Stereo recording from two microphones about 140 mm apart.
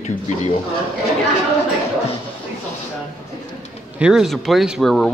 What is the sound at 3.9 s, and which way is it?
Speech, 5° right (ahead or behind).